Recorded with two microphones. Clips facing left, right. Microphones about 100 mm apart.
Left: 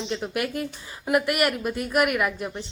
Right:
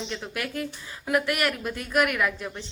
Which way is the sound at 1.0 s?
10° left (ahead or behind).